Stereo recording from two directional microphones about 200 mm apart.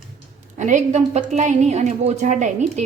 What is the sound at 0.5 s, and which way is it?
A woman's voice, 40° right (ahead or behind).